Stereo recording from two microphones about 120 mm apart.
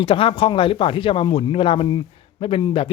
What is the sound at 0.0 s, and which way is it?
A man's voice, 45° left (ahead or behind).